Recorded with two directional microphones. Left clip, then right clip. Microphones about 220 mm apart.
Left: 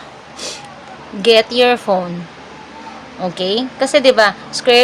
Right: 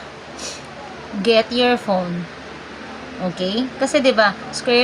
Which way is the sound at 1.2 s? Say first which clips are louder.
Left 5 dB; 40° left (ahead or behind).